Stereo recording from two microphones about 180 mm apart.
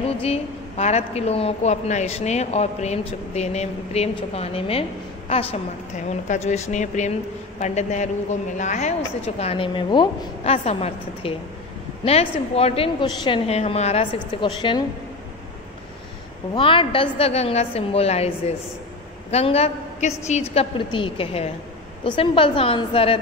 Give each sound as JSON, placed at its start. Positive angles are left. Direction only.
{"t": 0.0, "sound": "a woman's voice", "side_deg": 35}
{"t": 16.5, "sound": "a woman's voice", "side_deg": 30}
{"t": 19.3, "sound": "a woman's voice", "side_deg": 35}